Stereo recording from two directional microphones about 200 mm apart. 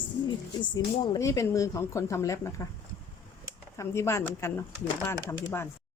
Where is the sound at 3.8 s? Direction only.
15° left (ahead or behind).